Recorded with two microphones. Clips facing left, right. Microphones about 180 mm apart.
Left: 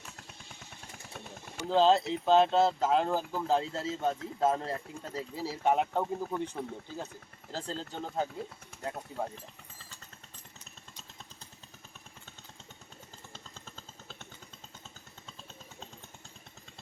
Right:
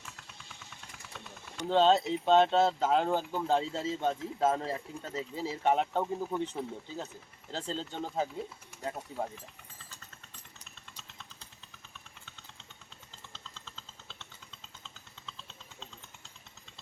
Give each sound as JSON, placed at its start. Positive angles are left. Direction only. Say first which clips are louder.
{"t": 0.4, "sound": "vehicle", "louder": "left 2 dB", "side_deg": 45}
{"t": 1.5, "sound": "speech", "louder": "even", "side_deg": 0}
{"t": 13.3, "sound": "a sound", "louder": "left 1 dB", "side_deg": 50}